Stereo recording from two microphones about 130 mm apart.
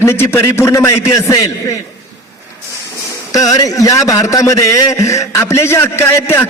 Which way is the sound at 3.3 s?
25° left (ahead or behind).